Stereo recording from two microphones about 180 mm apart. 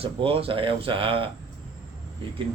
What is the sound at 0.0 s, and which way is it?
A man's voice, 30° right (ahead or behind).